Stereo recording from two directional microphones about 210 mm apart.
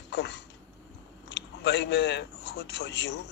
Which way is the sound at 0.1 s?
55° left (ahead or behind).